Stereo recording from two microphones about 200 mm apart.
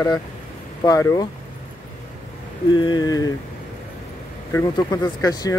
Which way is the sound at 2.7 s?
20° left (ahead or behind).